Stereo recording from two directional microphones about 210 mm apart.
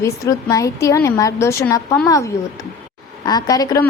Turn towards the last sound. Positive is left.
turn(degrees=20)  # may be behind; listen again after turning